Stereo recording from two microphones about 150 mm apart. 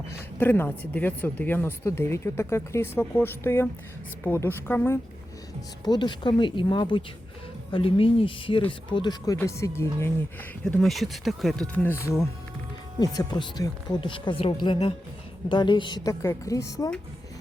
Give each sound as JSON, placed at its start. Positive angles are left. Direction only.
{"t": 0.1, "sound": "a woman's voice", "side_deg": 15}
{"t": 5.8, "sound": "speech", "side_deg": 30}
{"t": 10.7, "sound": "speech", "side_deg": 5}
{"t": 13.0, "sound": "speech", "side_deg": 25}
{"t": 16.2, "sound": "a woman's voice", "side_deg": 20}